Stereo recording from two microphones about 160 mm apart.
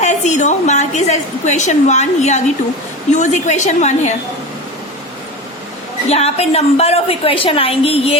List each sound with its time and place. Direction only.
0.0 s a woman's voice: 45° left (ahead or behind)
6.1 s a woman's voice: 40° left (ahead or behind)